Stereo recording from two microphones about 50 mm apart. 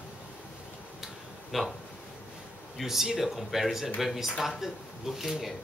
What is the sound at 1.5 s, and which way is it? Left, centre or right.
Speech, centre.